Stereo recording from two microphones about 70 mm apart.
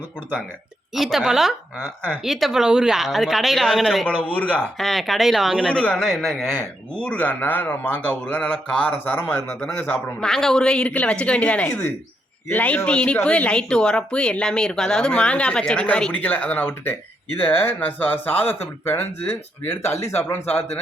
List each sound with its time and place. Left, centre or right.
0.9 s speech: centre
4.3 s speech: centre
4.8 s speech: centre
5.6 s speech: centre
6.0 s speech: centre; by 10.0 s left
10.2 s speech: centre; by 20.3 s left
20.3 s speech: left